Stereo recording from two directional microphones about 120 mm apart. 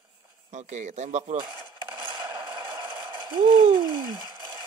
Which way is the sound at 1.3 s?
40° right (ahead or behind).